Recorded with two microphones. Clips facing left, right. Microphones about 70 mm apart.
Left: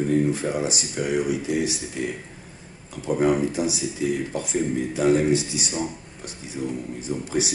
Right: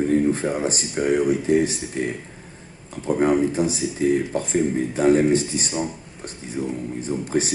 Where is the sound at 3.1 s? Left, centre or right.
Right.